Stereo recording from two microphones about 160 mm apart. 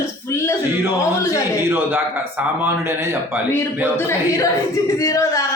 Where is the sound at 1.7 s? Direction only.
15° right (ahead or behind).